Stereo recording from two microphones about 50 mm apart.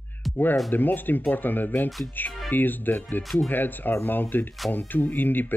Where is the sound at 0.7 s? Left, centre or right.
Left.